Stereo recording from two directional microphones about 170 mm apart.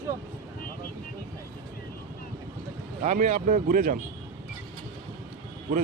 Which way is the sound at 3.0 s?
45° right (ahead or behind).